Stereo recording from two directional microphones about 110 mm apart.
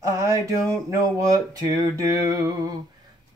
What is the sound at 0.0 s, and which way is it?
Mantra, 25° right (ahead or behind).